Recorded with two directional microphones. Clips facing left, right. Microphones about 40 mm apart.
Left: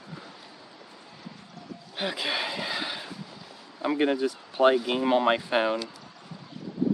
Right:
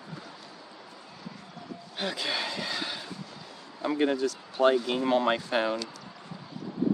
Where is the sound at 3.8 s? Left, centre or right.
Centre.